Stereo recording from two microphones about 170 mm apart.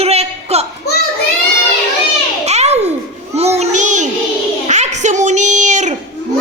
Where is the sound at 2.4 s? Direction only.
40° right (ahead or behind).